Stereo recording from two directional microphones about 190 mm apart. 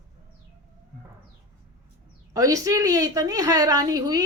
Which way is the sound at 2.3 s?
15° right (ahead or behind).